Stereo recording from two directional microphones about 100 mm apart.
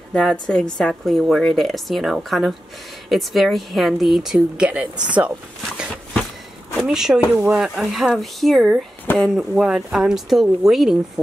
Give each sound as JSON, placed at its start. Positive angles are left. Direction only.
{"t": 0.1, "sound": "a woman's voice", "side_deg": 5}
{"t": 6.8, "sound": "a woman's voice", "side_deg": -5}
{"t": 9.0, "sound": "speech", "side_deg": 15}
{"t": 9.4, "sound": "a woman's voice", "side_deg": -5}